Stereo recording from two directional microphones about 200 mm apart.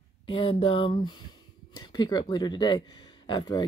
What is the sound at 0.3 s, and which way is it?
Speech, 25° left (ahead or behind).